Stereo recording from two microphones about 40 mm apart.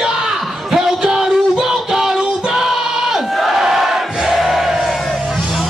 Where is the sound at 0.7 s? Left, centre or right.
Centre.